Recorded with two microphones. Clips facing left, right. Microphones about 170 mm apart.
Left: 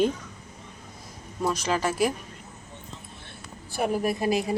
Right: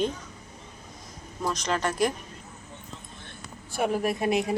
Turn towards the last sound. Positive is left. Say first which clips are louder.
# even
turn(degrees=0)  # may be behind; listen again after turning